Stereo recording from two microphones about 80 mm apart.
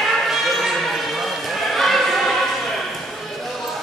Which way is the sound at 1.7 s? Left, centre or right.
Centre.